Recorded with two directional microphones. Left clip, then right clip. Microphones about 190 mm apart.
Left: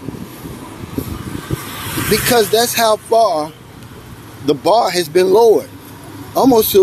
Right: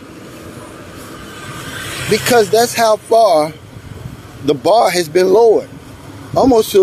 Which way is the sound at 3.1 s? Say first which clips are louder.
Right 6 dB; 25° right (ahead or behind).